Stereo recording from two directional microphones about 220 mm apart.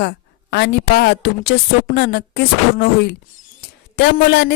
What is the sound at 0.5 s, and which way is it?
A woman's voice, 50° left (ahead or behind).